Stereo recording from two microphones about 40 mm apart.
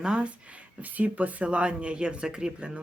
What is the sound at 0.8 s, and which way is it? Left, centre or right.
Speech, right.